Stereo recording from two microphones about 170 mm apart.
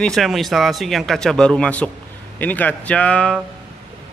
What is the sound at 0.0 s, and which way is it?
Speech, centre (ahead or behind).